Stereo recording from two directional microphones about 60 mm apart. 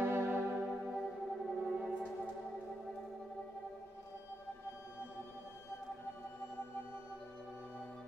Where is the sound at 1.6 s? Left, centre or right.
Right.